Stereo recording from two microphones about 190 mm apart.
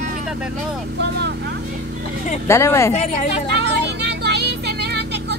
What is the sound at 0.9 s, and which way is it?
Speech, 65° right (ahead or behind).